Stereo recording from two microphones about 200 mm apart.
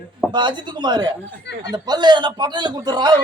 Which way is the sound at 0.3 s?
20° right (ahead or behind).